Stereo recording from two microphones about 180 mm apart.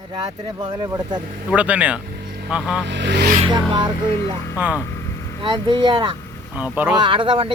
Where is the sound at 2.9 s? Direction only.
75° right (ahead or behind).